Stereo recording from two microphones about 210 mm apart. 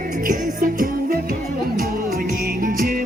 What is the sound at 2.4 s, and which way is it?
Music, 45° right (ahead or behind).